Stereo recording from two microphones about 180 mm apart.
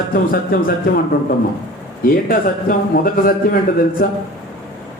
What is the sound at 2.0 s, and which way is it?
A man's voice, 55° left (ahead or behind).